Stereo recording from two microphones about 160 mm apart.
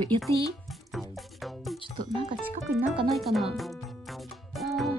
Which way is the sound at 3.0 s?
Centre (ahead or behind).